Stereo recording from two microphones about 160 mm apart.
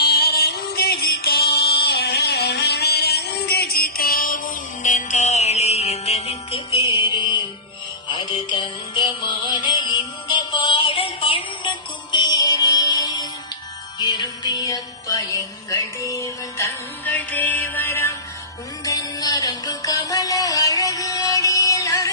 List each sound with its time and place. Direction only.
0.0 s music: 75° left (ahead or behind)
4.8 s music: 50° left (ahead or behind); by 22.1 s 20° left (ahead or behind)